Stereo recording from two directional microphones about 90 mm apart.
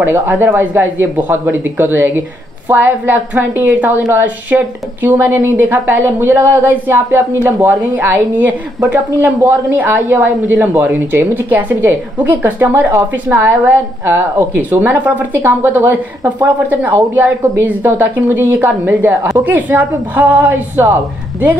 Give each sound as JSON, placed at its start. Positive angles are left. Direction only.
{"t": 0.0, "sound": "a woman's voice", "side_deg": -25}